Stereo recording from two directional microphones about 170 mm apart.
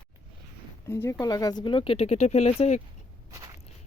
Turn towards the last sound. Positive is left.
turn(degrees=-20)  # may be behind; listen again after turning